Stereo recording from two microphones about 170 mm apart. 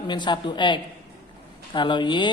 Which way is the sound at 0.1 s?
25° left (ahead or behind).